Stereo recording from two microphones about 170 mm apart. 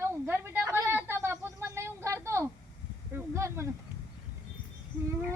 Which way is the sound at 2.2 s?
15° right (ahead or behind).